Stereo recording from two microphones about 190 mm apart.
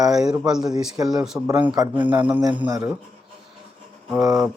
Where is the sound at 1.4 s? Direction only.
10° right (ahead or behind).